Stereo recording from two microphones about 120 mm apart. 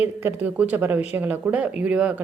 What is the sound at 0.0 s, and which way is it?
Speech, 15° right (ahead or behind).